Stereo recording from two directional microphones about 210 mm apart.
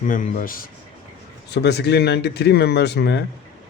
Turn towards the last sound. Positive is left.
turn(degrees=50)  # may be behind; listen again after turning